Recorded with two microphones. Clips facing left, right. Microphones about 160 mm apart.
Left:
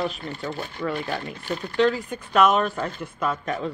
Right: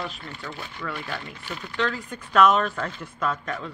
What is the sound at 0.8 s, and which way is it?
Speech, 20° left (ahead or behind).